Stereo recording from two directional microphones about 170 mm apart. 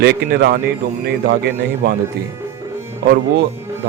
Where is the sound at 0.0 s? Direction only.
70° right (ahead or behind).